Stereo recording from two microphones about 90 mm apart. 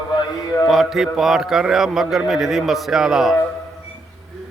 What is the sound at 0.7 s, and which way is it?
A man's voice, 5° right (ahead or behind).